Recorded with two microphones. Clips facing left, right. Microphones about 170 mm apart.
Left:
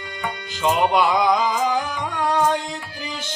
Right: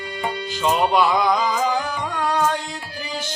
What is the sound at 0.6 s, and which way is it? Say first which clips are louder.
Music: even; 20° left (ahead or behind).